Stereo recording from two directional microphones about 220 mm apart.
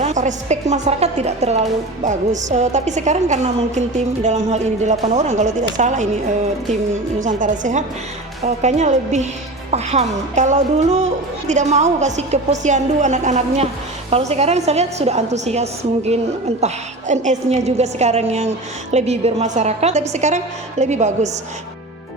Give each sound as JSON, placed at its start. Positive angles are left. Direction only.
{"t": 0.0, "sound": "a woman's voice", "side_deg": -35}
{"t": 7.2, "sound": "a woman's voice", "side_deg": -35}